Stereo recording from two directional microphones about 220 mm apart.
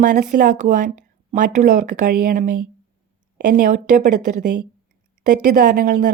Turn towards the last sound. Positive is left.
turn(degrees=-35)  # may be behind; listen again after turning